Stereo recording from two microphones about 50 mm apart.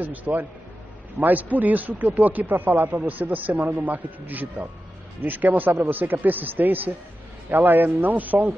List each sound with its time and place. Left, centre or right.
0.0 s speech: right